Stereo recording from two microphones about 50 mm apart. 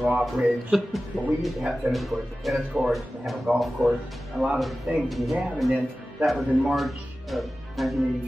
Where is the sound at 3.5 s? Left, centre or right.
Centre.